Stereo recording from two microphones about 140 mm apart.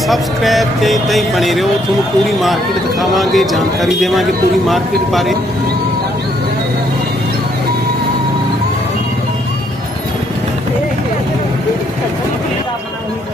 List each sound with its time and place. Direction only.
0.1 s a man's voice: centre (ahead or behind)
3.0 s a man's voice: centre (ahead or behind)